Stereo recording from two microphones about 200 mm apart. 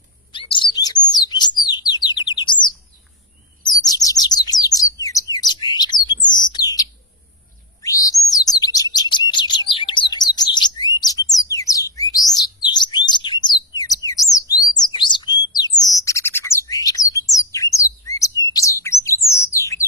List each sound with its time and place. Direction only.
0.3 s chirp: 25° left (ahead or behind)
1.1 s bird: 20° left (ahead or behind)
3.6 s chirp: 20° left (ahead or behind)
10.3 s bird: 20° left (ahead or behind)
18.1 s chirp: 15° left (ahead or behind)
19.4 s bird: 15° left (ahead or behind)